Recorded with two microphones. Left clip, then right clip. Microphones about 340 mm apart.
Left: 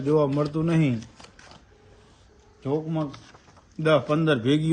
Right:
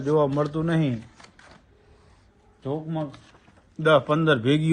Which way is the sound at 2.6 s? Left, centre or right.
Centre.